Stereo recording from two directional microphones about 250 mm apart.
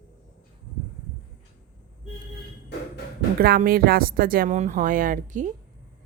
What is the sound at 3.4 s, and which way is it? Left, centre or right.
A woman's voice, right.